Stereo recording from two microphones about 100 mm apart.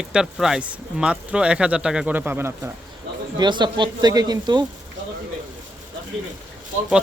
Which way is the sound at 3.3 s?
50° right (ahead or behind).